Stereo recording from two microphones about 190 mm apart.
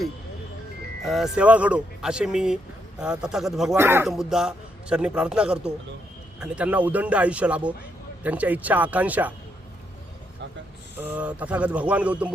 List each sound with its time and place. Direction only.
1.0 s a man's voice: centre (ahead or behind)
3.8 s a man's voice: 10° right (ahead or behind)
11.0 s a man's voice: 5° right (ahead or behind)